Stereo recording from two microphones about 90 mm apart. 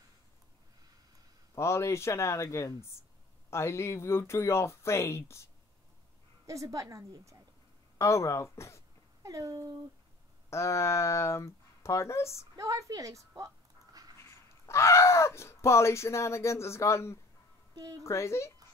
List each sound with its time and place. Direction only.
1.5 s speech: 30° left (ahead or behind)
6.4 s a woman's voice: 35° right (ahead or behind)
8.0 s speech: 35° left (ahead or behind)
9.2 s a woman's voice: 40° right (ahead or behind)
10.5 s speech: 30° left (ahead or behind)
12.5 s a woman's voice: 35° right (ahead or behind)
14.1 s speech: 30° left (ahead or behind)
17.7 s a woman's voice: 40° right (ahead or behind)
18.0 s speech: 30° left (ahead or behind)